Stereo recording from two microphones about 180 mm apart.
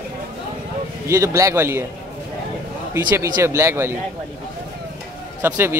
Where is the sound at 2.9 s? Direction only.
15° right (ahead or behind).